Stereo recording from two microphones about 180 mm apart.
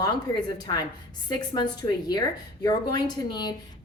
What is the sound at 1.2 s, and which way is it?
A woman's voice, 25° left (ahead or behind).